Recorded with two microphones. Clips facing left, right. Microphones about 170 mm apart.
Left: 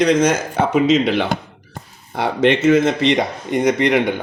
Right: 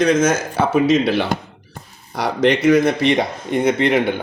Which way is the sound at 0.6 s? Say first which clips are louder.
Even; 20° left (ahead or behind).